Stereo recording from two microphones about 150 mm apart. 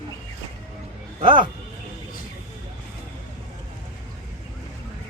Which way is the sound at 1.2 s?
35° right (ahead or behind).